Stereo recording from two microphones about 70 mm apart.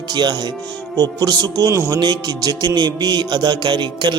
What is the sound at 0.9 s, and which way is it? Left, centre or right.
Speech, right.